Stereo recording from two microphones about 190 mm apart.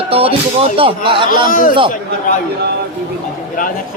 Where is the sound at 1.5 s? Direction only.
45° left (ahead or behind).